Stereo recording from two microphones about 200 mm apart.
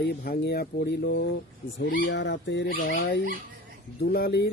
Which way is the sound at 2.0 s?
65° left (ahead or behind).